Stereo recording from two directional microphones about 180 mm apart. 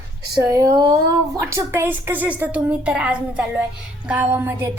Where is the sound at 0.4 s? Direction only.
20° right (ahead or behind).